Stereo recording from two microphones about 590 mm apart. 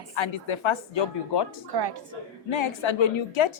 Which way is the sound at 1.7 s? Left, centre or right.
Right.